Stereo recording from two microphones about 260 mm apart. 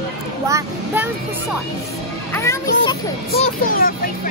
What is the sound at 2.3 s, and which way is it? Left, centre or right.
Children playing, centre.